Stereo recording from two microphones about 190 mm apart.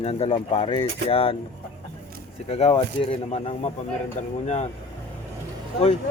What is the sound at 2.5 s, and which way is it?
Speech, 30° left (ahead or behind).